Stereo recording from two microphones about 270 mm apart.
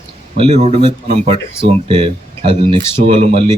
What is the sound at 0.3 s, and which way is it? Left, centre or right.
Speech, right.